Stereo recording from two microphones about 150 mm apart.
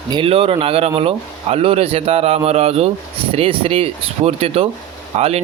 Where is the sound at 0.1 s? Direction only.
35° right (ahead or behind).